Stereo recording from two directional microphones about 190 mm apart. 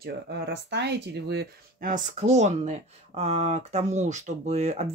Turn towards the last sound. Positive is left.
turn(degrees=-35)  # may be behind; listen again after turning